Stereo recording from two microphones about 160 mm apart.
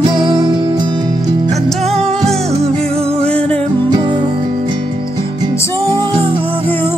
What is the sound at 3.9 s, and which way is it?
Music, 25° right (ahead or behind).